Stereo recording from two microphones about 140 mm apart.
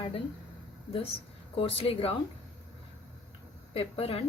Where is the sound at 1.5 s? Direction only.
40° left (ahead or behind).